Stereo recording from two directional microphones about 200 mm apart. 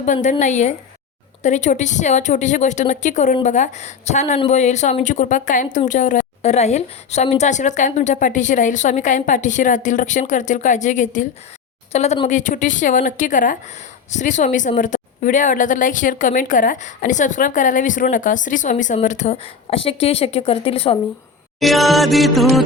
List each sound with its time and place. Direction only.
0.0 s a woman's voice: 40° left (ahead or behind)
21.6 s music: centre (ahead or behind)